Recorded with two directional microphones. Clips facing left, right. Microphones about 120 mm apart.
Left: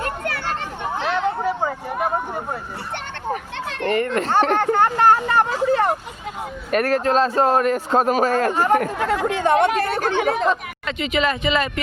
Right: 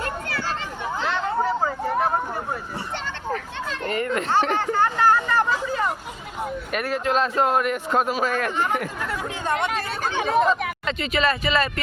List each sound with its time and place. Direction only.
0.0 s chatter: 55° left (ahead or behind)
3.7 s children playing: 65° left (ahead or behind)
4.0 s speech: 35° left (ahead or behind)
4.3 s a sound: 50° left (ahead or behind)
6.7 s speech: 40° left (ahead or behind)
9.0 s speech: 90° left; by 10.5 s 70° left (ahead or behind)
10.8 s speech: 15° left (ahead or behind)